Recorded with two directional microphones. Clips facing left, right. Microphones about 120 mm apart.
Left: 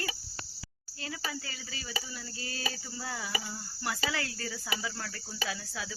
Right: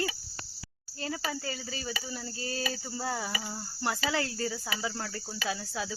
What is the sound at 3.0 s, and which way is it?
Cricket, 35° right (ahead or behind).